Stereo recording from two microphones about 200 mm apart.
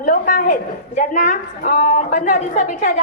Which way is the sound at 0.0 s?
45° left (ahead or behind).